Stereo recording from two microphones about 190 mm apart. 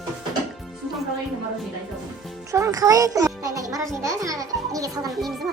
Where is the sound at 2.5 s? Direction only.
15° right (ahead or behind).